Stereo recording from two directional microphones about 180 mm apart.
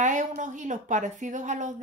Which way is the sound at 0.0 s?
45° right (ahead or behind).